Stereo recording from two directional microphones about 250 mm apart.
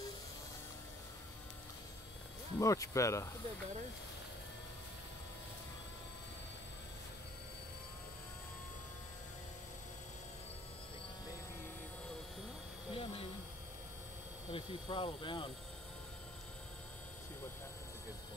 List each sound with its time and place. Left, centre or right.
2.6 s speech: centre
12.9 s a sound: left
14.5 s speech: centre